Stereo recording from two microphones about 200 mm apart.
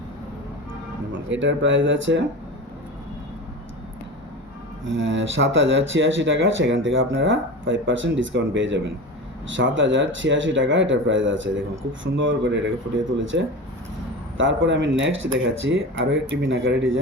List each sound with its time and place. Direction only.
1.1 s speech: 70° right (ahead or behind)
4.9 s speech: 70° right (ahead or behind)